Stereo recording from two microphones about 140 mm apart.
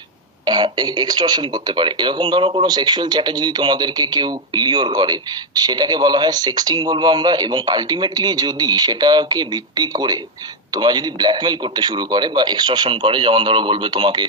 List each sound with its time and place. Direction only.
0.5 s a man's voice: 30° right (ahead or behind)